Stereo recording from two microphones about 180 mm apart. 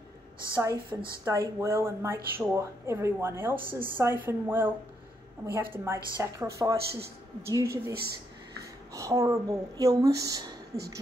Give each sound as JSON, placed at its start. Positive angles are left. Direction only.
{"t": 0.6, "sound": "a woman's voice", "side_deg": -15}
{"t": 8.9, "sound": "a woman's voice", "side_deg": -15}